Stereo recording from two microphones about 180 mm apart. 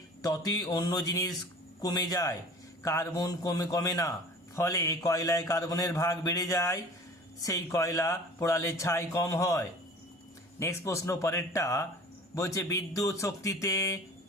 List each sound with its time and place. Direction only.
0.2 s a man's voice: 20° left (ahead or behind)